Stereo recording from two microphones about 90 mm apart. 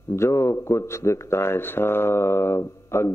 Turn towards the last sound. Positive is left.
turn(degrees=30)  # may be behind; listen again after turning